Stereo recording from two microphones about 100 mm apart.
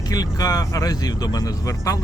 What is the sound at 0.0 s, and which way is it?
Speech, 40° left (ahead or behind).